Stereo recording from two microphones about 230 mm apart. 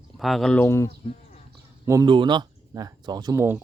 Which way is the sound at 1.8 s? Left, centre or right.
Centre.